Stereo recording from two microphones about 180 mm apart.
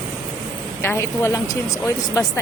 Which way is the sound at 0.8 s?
15° left (ahead or behind).